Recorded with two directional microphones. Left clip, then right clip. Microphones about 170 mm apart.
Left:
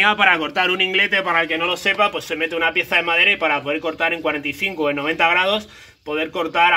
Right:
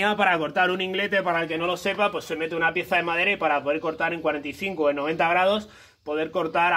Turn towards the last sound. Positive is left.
turn(degrees=-40)  # may be behind; listen again after turning